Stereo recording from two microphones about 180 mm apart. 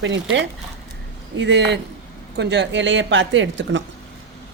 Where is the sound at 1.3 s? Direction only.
80° right.